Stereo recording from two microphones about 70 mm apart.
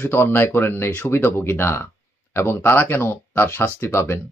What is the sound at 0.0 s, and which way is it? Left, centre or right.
Speech, left.